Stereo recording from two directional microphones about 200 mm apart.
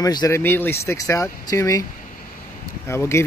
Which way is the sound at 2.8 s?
15° left (ahead or behind).